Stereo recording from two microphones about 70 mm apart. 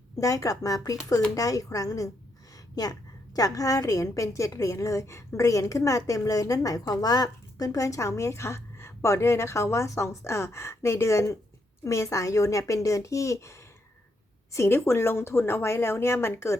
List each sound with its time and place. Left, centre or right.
0.2 s a woman's voice: left